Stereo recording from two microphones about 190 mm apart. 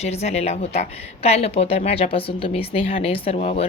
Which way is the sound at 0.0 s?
35° left (ahead or behind).